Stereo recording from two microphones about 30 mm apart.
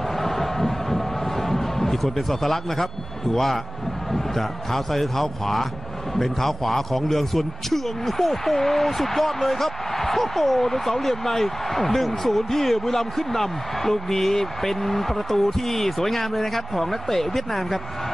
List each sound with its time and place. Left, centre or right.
0.2 s a sound: centre
1.5 s speech: centre
4.1 s a man's voice: centre